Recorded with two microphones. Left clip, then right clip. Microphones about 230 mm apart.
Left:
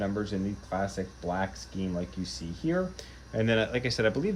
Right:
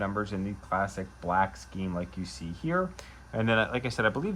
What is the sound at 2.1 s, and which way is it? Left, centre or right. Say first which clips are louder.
Speech: left 2 dB; centre.